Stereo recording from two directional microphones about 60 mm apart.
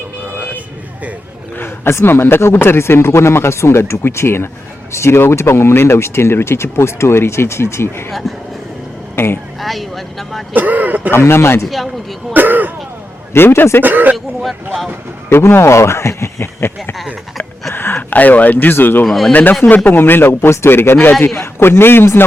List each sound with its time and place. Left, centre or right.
1.5 s speech: left
8.2 s speech: centre
9.1 s speech: left
9.6 s speech: centre
10.5 s speech: right
11.1 s speech: left
12.3 s throat clearing: right
13.3 s a man's voice: left
13.8 s speech: right
15.3 s speech: left
17.7 s a sound: left
18.1 s a man's voice: left
19.0 s speech: centre
19.3 s a man's voice: left